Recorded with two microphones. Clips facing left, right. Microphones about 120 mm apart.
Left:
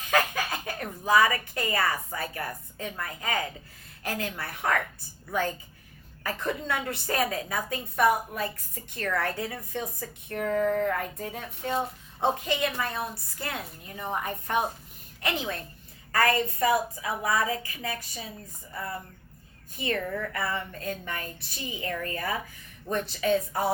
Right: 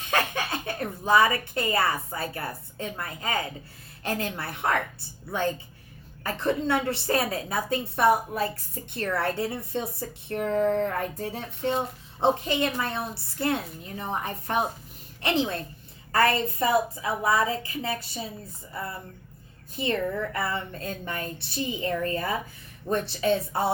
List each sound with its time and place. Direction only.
0.0 s a woman's voice: 30° right (ahead or behind)
6.2 s a woman's voice: 30° right (ahead or behind)
19.7 s speech: 25° right (ahead or behind)